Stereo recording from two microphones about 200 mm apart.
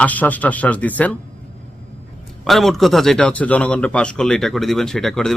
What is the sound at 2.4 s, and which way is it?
A man's voice, centre (ahead or behind).